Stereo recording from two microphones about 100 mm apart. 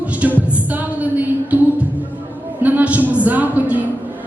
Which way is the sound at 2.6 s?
15° right (ahead or behind).